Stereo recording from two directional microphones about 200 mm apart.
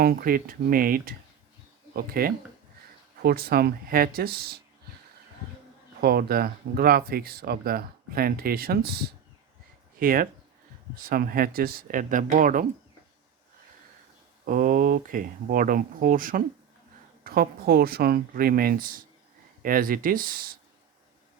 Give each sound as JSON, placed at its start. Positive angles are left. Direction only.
{"t": 0.0, "sound": "speech", "side_deg": -45}
{"t": 6.0, "sound": "speech", "side_deg": -50}
{"t": 14.4, "sound": "speech", "side_deg": -45}